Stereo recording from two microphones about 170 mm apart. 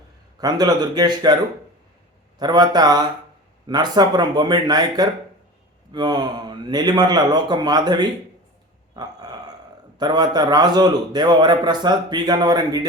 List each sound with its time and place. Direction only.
0.3 s a man's voice: 25° right (ahead or behind)
2.4 s a man's voice: 25° right (ahead or behind)
9.0 s a sound: 25° right (ahead or behind)
10.0 s a man's voice: 25° right (ahead or behind)